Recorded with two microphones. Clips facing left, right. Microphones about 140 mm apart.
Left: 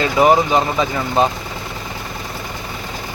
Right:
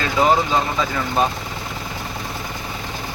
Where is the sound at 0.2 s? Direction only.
15° left (ahead or behind).